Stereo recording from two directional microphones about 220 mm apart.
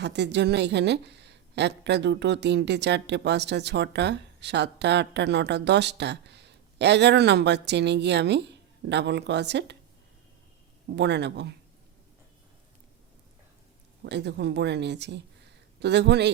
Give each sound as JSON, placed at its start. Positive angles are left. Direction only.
{"t": 0.0, "sound": "a woman's voice", "side_deg": -50}
{"t": 10.8, "sound": "a woman's voice", "side_deg": -50}
{"t": 14.0, "sound": "a woman's voice", "side_deg": -50}